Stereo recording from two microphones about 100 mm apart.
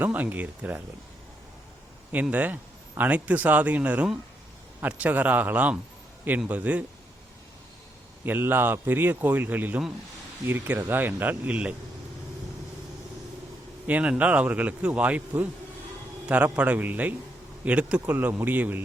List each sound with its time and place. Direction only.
0.0 s speech: 15° right (ahead or behind)
2.3 s speech: 15° right (ahead or behind)
8.2 s a man's voice: 20° right (ahead or behind)
13.8 s speech: 15° right (ahead or behind)